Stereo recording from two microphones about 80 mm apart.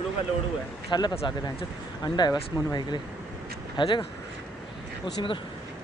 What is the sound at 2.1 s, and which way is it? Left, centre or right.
Speech, left.